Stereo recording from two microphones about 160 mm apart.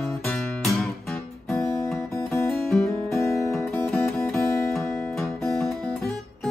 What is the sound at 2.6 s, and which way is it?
Music, centre (ahead or behind).